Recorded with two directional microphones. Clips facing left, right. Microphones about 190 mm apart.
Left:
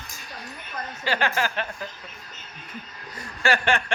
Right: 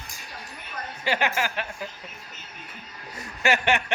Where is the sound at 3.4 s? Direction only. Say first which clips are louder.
Even; 20° right (ahead or behind).